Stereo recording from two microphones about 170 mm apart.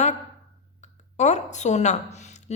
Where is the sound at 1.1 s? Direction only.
45° left (ahead or behind).